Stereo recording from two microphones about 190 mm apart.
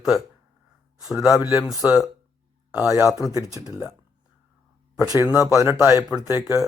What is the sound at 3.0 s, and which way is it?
Speech, 15° left (ahead or behind).